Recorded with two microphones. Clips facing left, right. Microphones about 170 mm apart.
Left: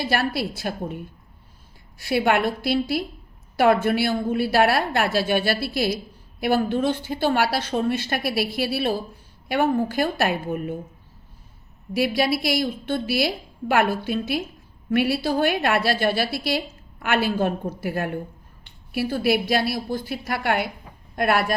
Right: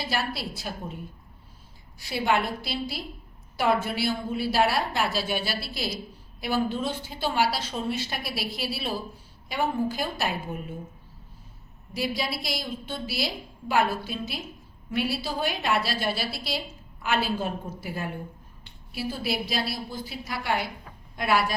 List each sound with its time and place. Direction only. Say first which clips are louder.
0.1 s a woman's voice: left 7 dB; 60° left (ahead or behind)
2.0 s a woman's voice: left 5 dB; 65° left (ahead or behind)
11.9 s a woman's voice: left 8 dB; 65° left (ahead or behind)